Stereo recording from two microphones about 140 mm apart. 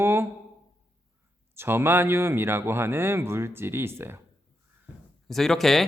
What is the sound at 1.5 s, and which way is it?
Speech, 15° right (ahead or behind).